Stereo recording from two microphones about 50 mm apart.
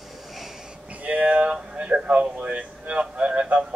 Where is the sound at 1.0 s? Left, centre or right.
Right.